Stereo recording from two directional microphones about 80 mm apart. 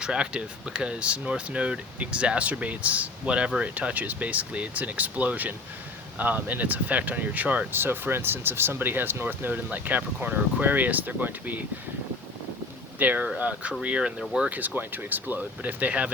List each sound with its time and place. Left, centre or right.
0.0 s speech: centre
13.0 s speech: centre